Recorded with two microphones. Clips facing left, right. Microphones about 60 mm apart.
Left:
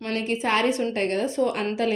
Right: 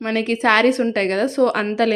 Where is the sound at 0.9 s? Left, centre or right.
Right.